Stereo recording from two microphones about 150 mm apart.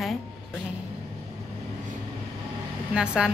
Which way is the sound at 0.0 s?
Centre (ahead or behind).